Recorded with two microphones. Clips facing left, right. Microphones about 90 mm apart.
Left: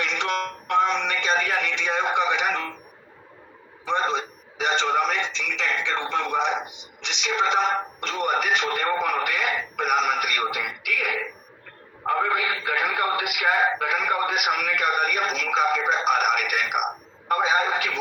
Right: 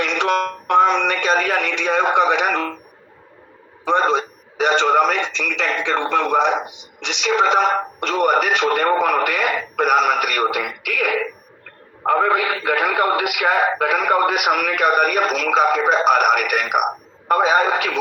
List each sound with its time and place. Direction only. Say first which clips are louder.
0.0 s music: right 7 dB; 60° right (ahead or behind)
3.8 s speech: right 7 dB; 60° right (ahead or behind)